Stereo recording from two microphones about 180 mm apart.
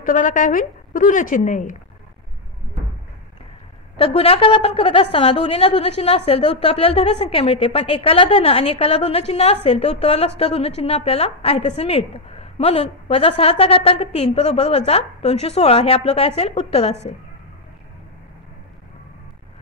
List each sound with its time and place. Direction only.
0.0 s a woman's voice: 45° left (ahead or behind)
3.9 s a woman's voice: 35° left (ahead or behind)